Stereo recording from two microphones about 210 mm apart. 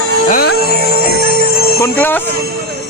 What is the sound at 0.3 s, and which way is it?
Music, 45° left (ahead or behind).